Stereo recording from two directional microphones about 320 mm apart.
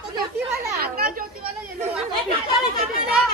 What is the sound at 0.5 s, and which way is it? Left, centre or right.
Chatter, right.